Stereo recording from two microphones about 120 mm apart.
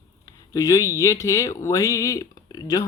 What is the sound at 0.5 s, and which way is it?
Speech, 30° left (ahead or behind).